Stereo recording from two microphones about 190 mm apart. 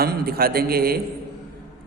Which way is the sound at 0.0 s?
55° right (ahead or behind).